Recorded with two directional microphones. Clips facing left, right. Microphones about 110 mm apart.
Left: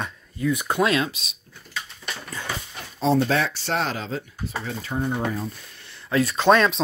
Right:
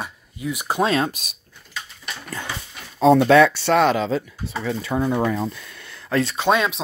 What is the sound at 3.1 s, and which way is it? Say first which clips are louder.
Speech: right 8 dB; 70° right (ahead or behind).